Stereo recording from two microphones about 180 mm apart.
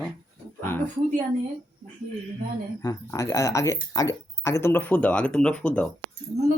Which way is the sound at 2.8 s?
20° left (ahead or behind).